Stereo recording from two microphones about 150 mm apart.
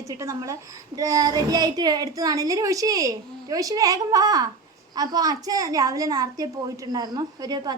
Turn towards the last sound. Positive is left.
turn(degrees=-25)  # may be behind; listen again after turning